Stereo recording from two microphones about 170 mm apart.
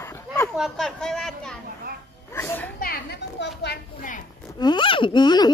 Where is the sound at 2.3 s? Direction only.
15° left (ahead or behind).